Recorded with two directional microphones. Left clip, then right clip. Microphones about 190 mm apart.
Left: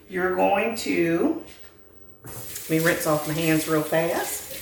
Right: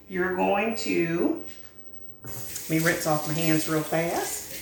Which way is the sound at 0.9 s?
30° left (ahead or behind).